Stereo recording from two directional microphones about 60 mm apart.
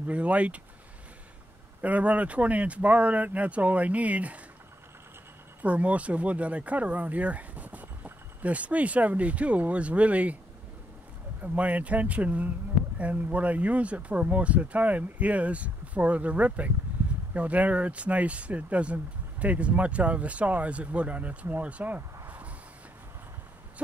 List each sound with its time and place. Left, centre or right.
0.1 s speech: right
1.8 s speech: right
5.6 s speech: right
11.4 s speech: right